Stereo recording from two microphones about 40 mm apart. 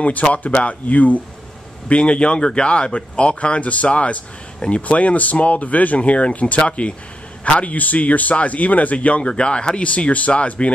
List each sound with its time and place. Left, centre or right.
0.0 s speech: left
1.9 s speech: left